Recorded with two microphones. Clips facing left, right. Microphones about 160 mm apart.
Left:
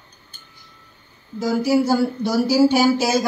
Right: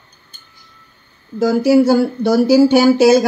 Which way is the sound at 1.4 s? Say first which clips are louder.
Right 7 dB; 65° right (ahead or behind).